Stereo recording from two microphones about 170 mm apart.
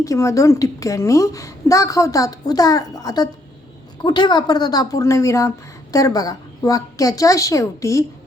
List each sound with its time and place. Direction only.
0.0 s a woman's voice: 20° left (ahead or behind)